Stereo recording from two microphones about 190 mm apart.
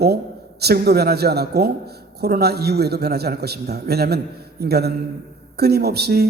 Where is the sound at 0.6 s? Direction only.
55° right (ahead or behind).